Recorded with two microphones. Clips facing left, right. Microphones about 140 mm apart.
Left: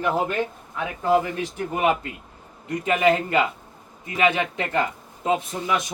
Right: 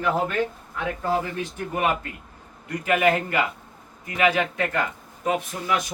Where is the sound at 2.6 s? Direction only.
25° left (ahead or behind).